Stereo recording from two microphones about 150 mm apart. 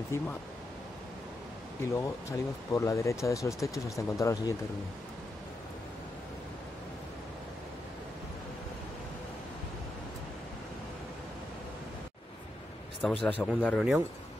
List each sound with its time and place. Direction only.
0.1 s a man's voice: 20° left (ahead or behind)
2.0 s speech: 20° left (ahead or behind)
13.1 s a man's voice: 10° left (ahead or behind)